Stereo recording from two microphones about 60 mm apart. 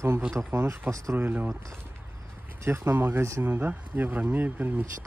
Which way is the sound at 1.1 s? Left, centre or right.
Right.